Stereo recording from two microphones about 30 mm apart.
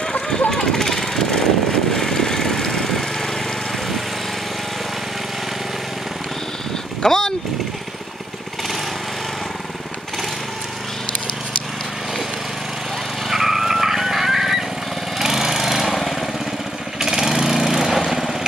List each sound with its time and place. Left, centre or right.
0.5 s vehicle: centre
7.0 s vehicle: centre
13.3 s vehicle: centre
15.1 s lawn mower: centre
17.0 s lawn mower: centre